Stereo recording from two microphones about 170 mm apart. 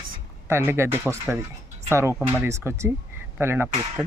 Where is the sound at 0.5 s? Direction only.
15° right (ahead or behind).